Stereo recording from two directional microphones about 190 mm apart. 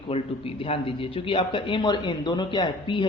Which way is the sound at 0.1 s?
30° left (ahead or behind).